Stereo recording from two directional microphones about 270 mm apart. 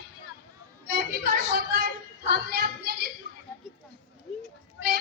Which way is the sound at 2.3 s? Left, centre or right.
Right.